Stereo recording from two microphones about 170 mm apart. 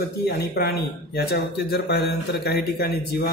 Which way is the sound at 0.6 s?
70° left (ahead or behind).